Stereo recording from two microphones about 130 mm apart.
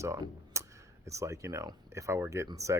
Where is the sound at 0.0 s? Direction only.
25° right (ahead or behind).